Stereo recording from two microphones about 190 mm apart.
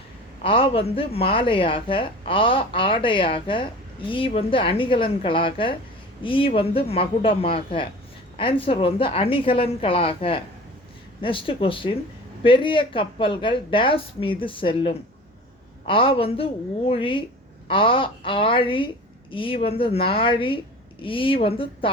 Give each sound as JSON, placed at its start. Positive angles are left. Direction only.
{"t": 0.4, "sound": "a woman's voice", "side_deg": 30}